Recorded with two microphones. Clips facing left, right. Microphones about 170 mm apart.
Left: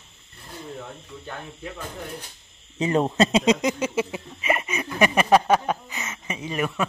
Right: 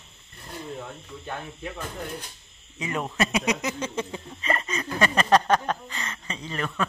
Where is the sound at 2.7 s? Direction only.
30° left (ahead or behind).